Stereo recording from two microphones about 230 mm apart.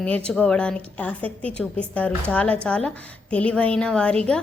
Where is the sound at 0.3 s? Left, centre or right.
Centre.